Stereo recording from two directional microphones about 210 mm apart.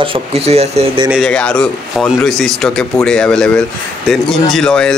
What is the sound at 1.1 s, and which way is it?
Speech, centre (ahead or behind).